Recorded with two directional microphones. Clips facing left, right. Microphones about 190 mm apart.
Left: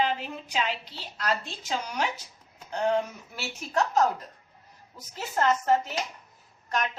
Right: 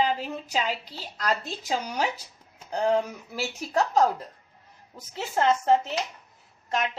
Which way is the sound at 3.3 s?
35° right (ahead or behind).